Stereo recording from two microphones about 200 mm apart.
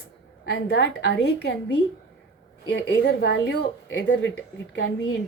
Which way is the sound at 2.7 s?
60° left (ahead or behind).